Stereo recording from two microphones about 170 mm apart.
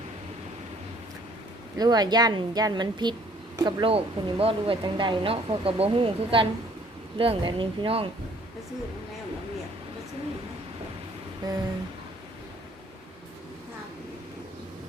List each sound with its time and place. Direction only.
1.8 s a woman's voice: 25° right (ahead or behind)
11.4 s a woman's voice: 25° right (ahead or behind)